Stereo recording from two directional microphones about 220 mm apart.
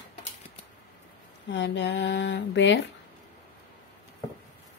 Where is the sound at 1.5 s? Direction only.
55° left (ahead or behind).